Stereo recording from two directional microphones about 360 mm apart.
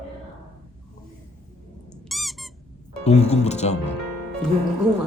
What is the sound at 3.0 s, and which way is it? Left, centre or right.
Speech, centre.